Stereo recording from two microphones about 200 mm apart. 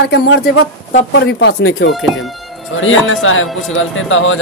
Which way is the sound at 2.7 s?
80° left.